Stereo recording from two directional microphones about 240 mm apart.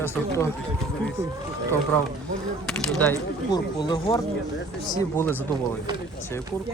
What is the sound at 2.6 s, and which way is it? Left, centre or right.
Speech, centre.